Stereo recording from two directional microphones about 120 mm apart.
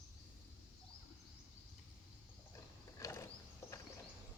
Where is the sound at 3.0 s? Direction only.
25° left (ahead or behind).